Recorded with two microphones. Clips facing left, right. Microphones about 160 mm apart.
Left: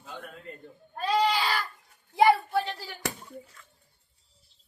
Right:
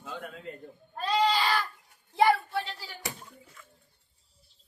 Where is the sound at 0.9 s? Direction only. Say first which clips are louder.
Left 1 dB; 10° left (ahead or behind).